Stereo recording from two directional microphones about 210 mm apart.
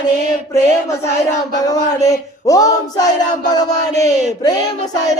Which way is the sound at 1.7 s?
15° left (ahead or behind).